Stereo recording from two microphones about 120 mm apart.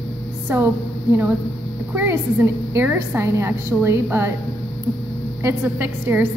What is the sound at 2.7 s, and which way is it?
Music, 20° right (ahead or behind).